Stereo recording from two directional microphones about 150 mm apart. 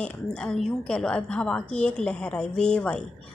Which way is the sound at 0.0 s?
5° left (ahead or behind).